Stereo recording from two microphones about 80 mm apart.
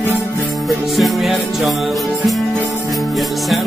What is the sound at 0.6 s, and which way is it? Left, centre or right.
Music, centre.